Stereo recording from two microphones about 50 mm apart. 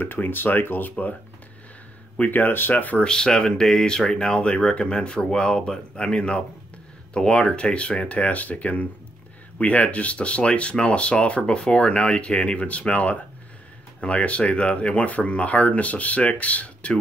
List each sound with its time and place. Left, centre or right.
0.0 s speech: left
2.1 s speech: left
3.0 s speech: centre